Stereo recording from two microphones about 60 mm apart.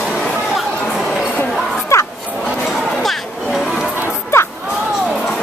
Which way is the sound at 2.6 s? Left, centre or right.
Centre.